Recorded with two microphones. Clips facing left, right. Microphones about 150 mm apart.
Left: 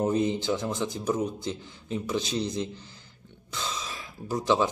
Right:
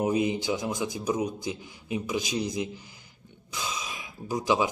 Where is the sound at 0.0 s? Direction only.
10° right (ahead or behind).